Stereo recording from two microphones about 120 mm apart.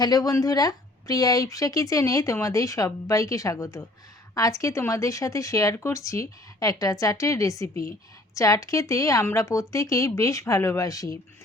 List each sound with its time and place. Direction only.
0.0 s speech: 30° left (ahead or behind)